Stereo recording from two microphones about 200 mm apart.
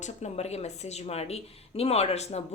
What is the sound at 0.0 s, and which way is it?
Speech, 35° left (ahead or behind).